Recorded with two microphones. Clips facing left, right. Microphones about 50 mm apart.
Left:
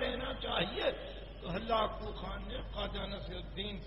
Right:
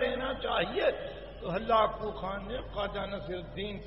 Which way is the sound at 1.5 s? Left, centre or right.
Right.